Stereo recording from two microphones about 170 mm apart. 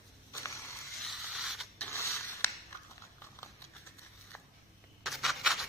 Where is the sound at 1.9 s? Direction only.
15° left (ahead or behind).